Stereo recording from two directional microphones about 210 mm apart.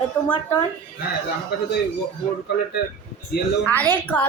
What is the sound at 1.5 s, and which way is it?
Speech, 50° left (ahead or behind).